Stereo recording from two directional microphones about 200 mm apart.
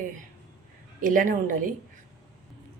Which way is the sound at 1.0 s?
40° right (ahead or behind).